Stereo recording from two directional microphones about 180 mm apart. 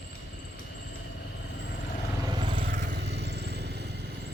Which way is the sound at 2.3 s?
30° right (ahead or behind).